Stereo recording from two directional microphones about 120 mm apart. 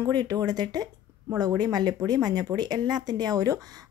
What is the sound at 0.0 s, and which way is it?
Speech, 35° right (ahead or behind).